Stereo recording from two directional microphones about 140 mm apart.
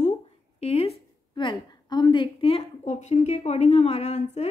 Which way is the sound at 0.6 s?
45° left (ahead or behind).